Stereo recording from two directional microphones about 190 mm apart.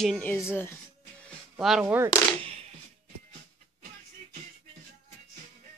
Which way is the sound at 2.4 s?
30° right (ahead or behind).